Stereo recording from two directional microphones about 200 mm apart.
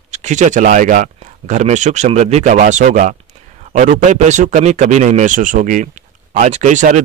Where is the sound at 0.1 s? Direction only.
35° right (ahead or behind).